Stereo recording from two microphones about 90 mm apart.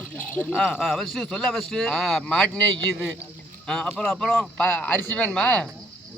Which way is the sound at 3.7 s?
5° left (ahead or behind).